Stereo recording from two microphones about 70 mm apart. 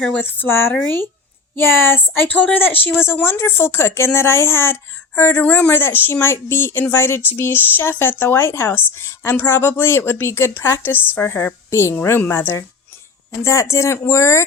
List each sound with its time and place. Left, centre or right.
0.3 s a woman's voice: left
5.4 s a woman's voice: left
5.8 s speech: left
13.4 s speech: left